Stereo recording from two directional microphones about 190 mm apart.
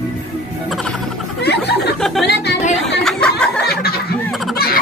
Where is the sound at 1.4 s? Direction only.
60° left (ahead or behind).